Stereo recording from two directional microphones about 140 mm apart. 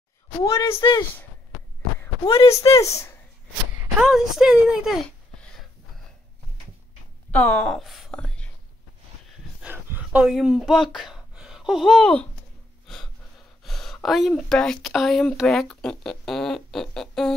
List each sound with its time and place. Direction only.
0.4 s a woman's voice: 25° left (ahead or behind)
2.2 s speech: 40° left (ahead or behind)
2.7 s a woman's voice: 20° left (ahead or behind)
4.0 s speech: 5° right (ahead or behind)
7.2 s speech: 10° left (ahead or behind)
9.6 s a sound: 10° right (ahead or behind); by 12.3 s 5° left (ahead or behind)
12.8 s gasp: centre (ahead or behind)
13.6 s speech: centre (ahead or behind)